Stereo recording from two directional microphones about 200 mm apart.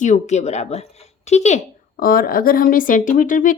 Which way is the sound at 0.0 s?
35° left (ahead or behind).